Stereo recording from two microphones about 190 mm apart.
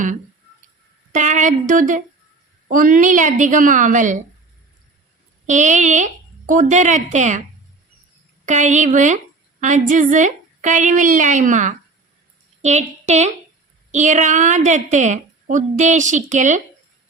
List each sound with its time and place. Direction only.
1.1 s a woman's voice: 40° right (ahead or behind)
5.5 s a woman's voice: 40° right (ahead or behind)
8.4 s a woman's voice: 40° right (ahead or behind)